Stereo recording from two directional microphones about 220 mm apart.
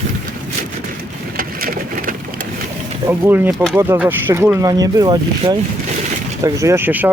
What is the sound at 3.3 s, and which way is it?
Speech, 5° right (ahead or behind).